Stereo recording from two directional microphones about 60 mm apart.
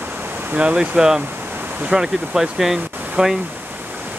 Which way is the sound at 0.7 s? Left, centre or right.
Centre.